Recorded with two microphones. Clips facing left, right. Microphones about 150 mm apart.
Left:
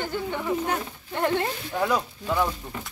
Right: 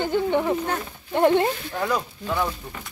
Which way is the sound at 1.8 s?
Centre (ahead or behind).